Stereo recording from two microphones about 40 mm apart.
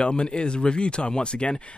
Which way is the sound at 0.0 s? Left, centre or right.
Left.